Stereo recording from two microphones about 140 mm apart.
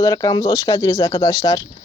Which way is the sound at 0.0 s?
25° left (ahead or behind).